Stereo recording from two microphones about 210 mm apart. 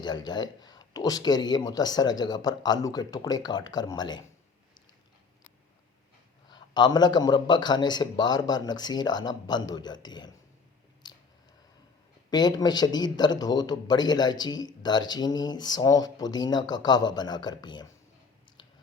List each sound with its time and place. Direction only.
0.0 s a man's voice: 20° left (ahead or behind)
6.5 s a man's voice: 20° left (ahead or behind)
11.0 s a sound: 20° left (ahead or behind)
12.3 s a man's voice: 20° left (ahead or behind)